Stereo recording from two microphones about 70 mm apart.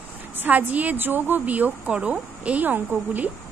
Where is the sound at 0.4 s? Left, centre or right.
Right.